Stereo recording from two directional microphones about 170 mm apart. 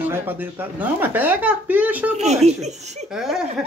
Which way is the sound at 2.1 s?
40° right (ahead or behind).